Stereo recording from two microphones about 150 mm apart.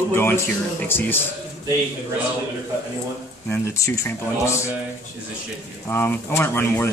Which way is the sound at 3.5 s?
20° left (ahead or behind).